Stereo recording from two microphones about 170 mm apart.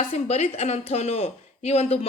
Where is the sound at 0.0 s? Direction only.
40° left (ahead or behind).